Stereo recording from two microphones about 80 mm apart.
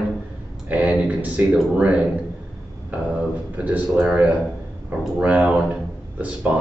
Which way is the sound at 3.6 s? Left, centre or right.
Centre.